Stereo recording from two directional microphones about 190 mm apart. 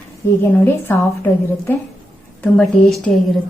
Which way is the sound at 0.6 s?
15° left (ahead or behind).